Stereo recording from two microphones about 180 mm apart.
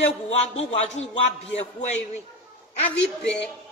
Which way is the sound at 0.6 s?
35° left (ahead or behind).